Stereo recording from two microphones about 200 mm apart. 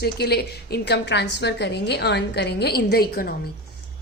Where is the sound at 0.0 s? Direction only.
55° left (ahead or behind).